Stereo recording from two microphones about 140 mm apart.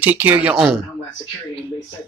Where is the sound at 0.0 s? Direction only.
10° right (ahead or behind).